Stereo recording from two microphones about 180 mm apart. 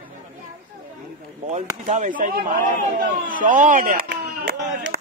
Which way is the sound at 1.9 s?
45° right (ahead or behind).